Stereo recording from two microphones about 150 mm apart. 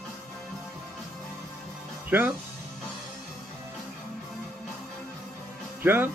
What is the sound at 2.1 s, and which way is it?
Music, 10° right (ahead or behind).